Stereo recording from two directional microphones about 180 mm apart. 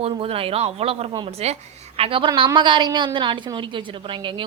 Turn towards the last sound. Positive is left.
turn(degrees=-30)  # may be behind; listen again after turning